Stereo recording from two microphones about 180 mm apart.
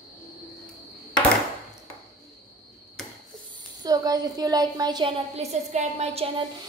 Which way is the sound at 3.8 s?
20° right (ahead or behind).